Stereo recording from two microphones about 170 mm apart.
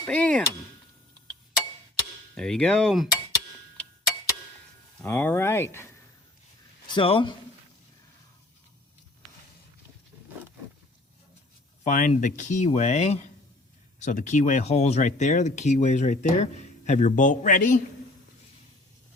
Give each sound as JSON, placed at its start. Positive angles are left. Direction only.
{"t": 0.0, "sound": "a sound", "side_deg": 10}
{"t": 2.3, "sound": "speech", "side_deg": 5}
{"t": 4.9, "sound": "speech", "side_deg": 10}
{"t": 6.8, "sound": "speech", "side_deg": 30}
{"t": 11.9, "sound": "speech", "side_deg": 50}